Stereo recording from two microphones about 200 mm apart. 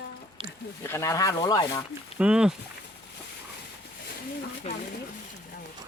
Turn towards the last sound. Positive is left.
turn(degrees=30)  # may be behind; listen again after turning